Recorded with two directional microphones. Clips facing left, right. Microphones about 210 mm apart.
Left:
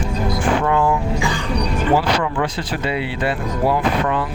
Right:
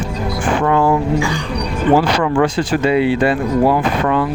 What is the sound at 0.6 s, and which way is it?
Speech, 50° right (ahead or behind).